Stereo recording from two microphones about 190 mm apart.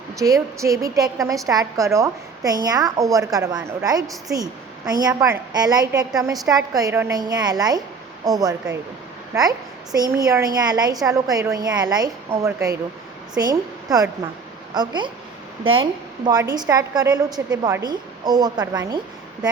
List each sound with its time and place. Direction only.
0.6 s a woman's voice: 20° right (ahead or behind)